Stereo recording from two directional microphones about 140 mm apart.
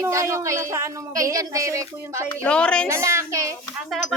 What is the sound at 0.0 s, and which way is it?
A woman's voice, 20° right (ahead or behind).